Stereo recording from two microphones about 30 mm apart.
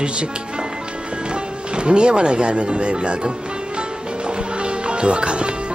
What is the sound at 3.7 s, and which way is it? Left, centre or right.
Music, right.